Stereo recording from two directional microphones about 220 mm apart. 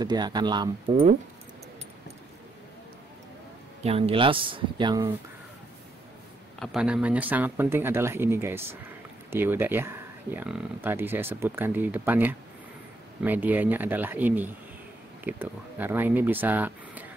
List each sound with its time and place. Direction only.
0.0 s speech: 20° right (ahead or behind)
3.8 s speech: 25° right (ahead or behind)
6.6 s speech: 5° right (ahead or behind)